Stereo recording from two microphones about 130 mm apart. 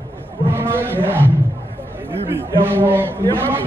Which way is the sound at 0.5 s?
15° right (ahead or behind).